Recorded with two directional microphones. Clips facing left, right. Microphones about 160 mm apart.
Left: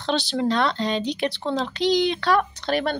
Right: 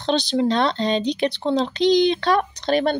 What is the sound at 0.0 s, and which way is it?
Speech, 20° right (ahead or behind).